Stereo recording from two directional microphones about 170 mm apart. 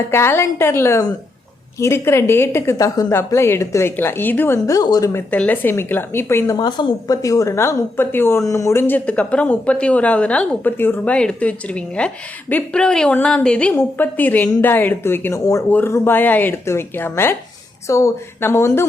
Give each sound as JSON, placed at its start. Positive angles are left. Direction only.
{"t": 0.1, "sound": "a woman's voice", "side_deg": 15}
{"t": 6.6, "sound": "a woman's voice", "side_deg": 25}